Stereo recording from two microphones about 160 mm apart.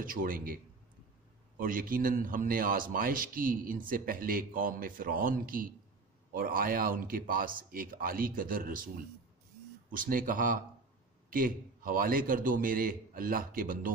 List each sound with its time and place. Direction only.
0.0 s a man's voice: 60° right (ahead or behind)
1.6 s a man's voice: 60° right (ahead or behind)
9.9 s a man's voice: 60° right (ahead or behind)